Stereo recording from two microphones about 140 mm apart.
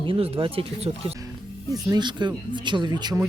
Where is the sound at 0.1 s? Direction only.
40° right (ahead or behind).